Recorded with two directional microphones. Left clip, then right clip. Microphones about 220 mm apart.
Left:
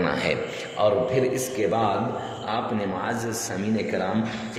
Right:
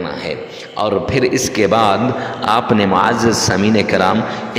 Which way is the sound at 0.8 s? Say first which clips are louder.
Right 5 dB; 35° right (ahead or behind).